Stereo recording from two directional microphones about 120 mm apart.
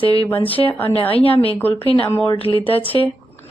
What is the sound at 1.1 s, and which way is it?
A woman's voice, 50° left (ahead or behind).